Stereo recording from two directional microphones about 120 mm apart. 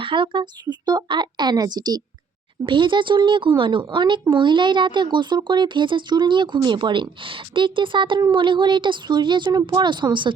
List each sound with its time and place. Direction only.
0.0 s speech: 45° right (ahead or behind)